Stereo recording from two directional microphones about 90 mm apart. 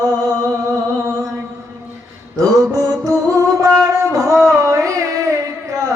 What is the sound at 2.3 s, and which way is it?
Mantra, 40° right (ahead or behind).